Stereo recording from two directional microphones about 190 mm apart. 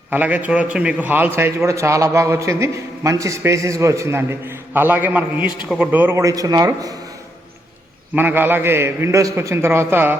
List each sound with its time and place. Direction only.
0.1 s a man's voice: 10° right (ahead or behind)
8.1 s a man's voice: 10° right (ahead or behind)